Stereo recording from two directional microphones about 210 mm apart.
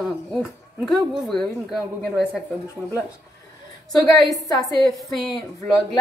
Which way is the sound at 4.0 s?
20° left (ahead or behind).